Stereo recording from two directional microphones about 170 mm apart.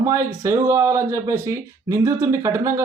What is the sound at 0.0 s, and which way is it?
Speech, 15° right (ahead or behind).